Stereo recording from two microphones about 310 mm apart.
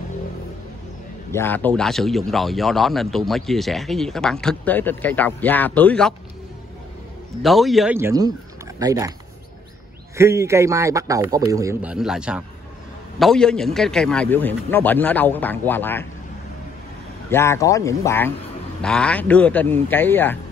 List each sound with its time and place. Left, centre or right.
1.3 s speech: centre
7.4 s speech: centre
10.1 s a man's voice: centre
17.3 s speech: centre